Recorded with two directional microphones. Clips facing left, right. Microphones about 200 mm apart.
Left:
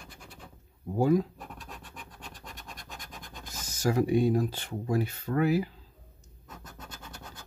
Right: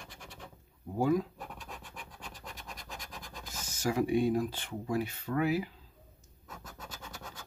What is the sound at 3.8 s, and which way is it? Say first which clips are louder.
Speech: left 3 dB; 40° left (ahead or behind).